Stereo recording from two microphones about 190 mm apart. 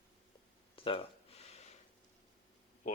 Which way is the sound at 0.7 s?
30° left (ahead or behind).